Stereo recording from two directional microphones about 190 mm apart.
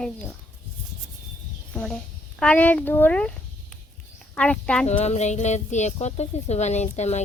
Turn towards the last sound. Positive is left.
turn(degrees=35)  # may be behind; listen again after turning